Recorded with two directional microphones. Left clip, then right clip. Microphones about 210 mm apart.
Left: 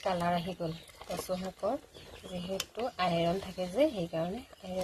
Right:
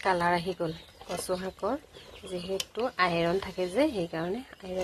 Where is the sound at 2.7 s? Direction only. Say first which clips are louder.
Right 4 dB; 20° right (ahead or behind).